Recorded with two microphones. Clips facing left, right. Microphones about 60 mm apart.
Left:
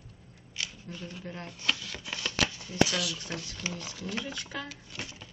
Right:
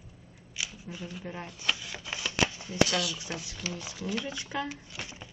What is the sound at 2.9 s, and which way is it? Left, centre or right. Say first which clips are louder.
Speech: right 2 dB; centre.